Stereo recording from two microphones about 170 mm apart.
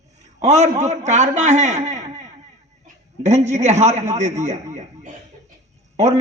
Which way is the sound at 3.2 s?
45° right (ahead or behind).